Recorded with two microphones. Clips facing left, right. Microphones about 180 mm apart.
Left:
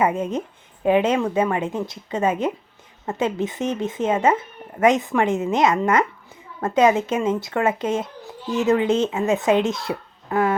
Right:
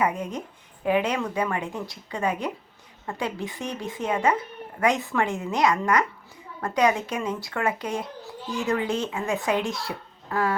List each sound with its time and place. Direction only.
0.0 s speech: 25° left (ahead or behind)